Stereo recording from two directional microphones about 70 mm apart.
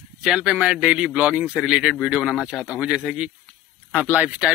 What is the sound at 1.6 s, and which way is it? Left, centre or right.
A man's voice, centre.